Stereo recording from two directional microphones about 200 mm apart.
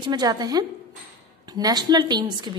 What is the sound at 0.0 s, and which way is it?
A woman's voice, 20° right (ahead or behind).